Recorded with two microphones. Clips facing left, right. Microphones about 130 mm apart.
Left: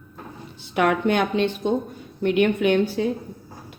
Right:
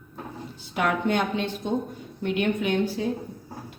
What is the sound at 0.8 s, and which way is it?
A woman's voice, 75° left (ahead or behind).